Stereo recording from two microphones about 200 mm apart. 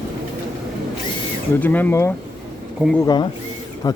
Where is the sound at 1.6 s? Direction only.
10° left (ahead or behind).